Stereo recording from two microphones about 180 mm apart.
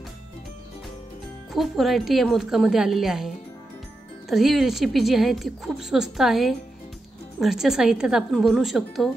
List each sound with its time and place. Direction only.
1.5 s a woman's voice: centre (ahead or behind)